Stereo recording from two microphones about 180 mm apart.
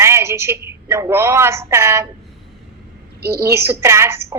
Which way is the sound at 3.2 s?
60° right (ahead or behind).